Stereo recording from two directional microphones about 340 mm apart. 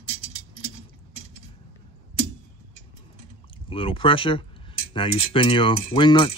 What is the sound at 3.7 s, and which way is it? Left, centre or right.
Speech, centre.